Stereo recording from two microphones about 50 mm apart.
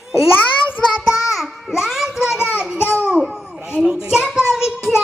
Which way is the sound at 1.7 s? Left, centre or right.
Centre.